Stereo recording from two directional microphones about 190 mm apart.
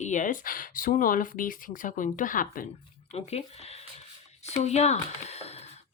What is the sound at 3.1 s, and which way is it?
Speech, 35° left (ahead or behind).